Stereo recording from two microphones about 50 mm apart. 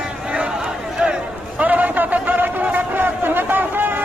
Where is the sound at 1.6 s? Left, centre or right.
Right.